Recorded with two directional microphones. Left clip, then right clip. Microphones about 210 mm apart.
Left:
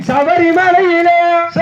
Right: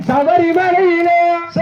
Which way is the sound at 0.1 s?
30° left (ahead or behind).